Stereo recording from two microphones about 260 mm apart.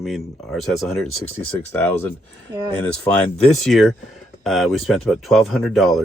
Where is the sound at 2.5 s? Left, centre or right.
Centre.